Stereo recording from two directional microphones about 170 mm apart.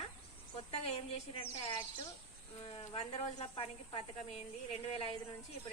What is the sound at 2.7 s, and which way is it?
Speech, 35° left (ahead or behind).